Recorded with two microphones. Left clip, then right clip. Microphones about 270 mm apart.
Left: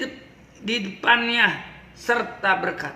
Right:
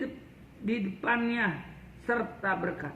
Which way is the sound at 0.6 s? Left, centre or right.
Left.